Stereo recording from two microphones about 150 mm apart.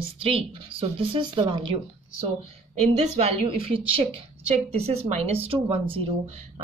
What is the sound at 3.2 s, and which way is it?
Speech, 40° right (ahead or behind).